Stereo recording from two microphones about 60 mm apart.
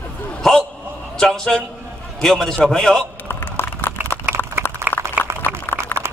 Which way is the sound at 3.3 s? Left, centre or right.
Left.